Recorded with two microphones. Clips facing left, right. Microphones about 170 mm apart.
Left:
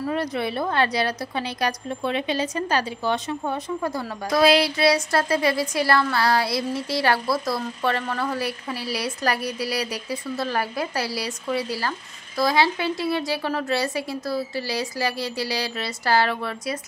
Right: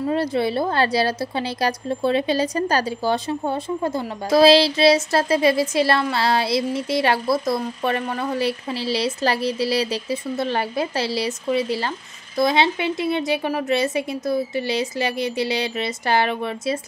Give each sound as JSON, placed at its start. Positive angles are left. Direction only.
{"t": 0.0, "sound": "a woman's voice", "side_deg": -30}